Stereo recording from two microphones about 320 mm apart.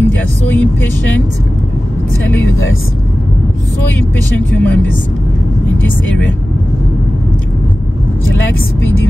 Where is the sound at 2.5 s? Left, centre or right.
Left.